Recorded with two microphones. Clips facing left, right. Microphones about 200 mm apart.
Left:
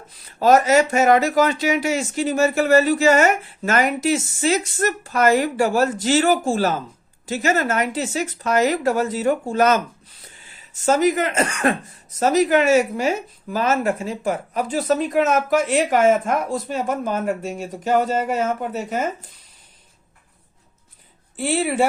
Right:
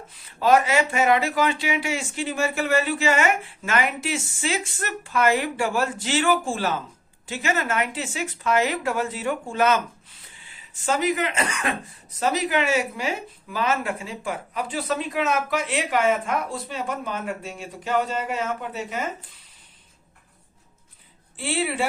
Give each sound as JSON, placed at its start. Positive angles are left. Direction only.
{"t": 0.3, "sound": "speech", "side_deg": 40}
{"t": 10.8, "sound": "speech", "side_deg": 45}
{"t": 21.3, "sound": "speech", "side_deg": 45}